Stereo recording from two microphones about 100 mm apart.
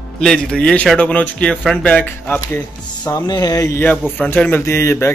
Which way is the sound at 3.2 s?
40° left (ahead or behind).